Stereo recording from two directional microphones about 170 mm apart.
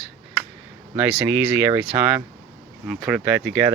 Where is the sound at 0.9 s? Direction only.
10° right (ahead or behind).